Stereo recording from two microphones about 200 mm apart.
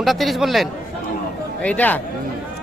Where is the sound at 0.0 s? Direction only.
Centre (ahead or behind).